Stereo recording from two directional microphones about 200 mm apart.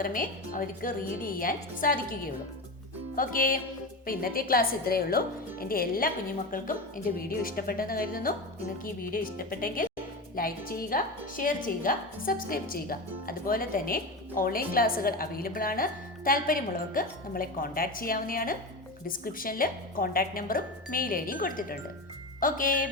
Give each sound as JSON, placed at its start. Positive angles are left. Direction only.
{"t": 0.0, "sound": "a woman's voice", "side_deg": 45}